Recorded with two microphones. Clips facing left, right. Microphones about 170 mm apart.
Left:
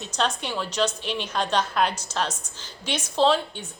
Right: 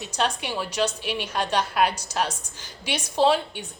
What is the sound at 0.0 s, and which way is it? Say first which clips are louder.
A woman's voice: even; 10° right (ahead or behind).